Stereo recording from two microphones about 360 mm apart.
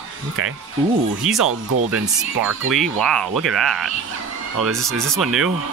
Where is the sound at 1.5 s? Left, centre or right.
Right.